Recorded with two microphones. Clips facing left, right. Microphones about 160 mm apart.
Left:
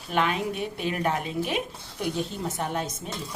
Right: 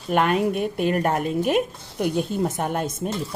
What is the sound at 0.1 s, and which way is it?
A woman's voice, 50° right (ahead or behind).